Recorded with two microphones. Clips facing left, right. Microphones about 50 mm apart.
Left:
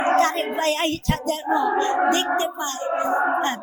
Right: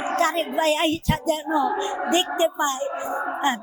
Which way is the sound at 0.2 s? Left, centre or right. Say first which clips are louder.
Left 2 dB; centre.